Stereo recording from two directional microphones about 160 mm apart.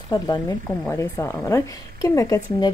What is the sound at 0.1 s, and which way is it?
Speech, 30° left (ahead or behind).